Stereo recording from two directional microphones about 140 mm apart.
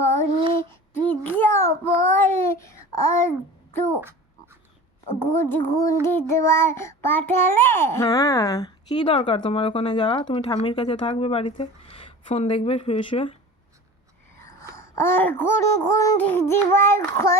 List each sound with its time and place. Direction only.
0.7 s child singing: 15° left (ahead or behind)
2.0 s babbling: 15° left (ahead or behind)
5.3 s a sound: 15° left (ahead or behind)
5.7 s child singing: 25° left (ahead or behind)
9.0 s speech: 40° left (ahead or behind)
14.4 s a sound: 20° left (ahead or behind)